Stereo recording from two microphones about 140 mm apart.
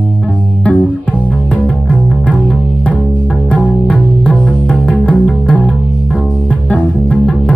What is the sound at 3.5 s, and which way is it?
Music, 10° left (ahead or behind).